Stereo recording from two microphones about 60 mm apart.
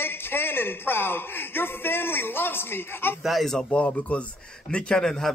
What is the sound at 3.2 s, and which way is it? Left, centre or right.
Speech, centre.